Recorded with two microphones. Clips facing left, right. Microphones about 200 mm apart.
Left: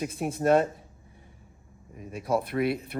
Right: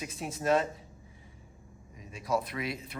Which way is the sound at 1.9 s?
55° left (ahead or behind).